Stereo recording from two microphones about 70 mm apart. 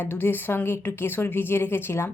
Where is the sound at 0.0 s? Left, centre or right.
Left.